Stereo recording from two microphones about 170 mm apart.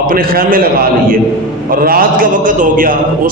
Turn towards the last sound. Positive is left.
turn(degrees=-55)  # may be behind; listen again after turning